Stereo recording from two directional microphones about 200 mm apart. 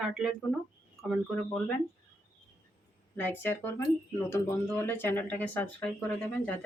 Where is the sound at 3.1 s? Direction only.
10° left (ahead or behind).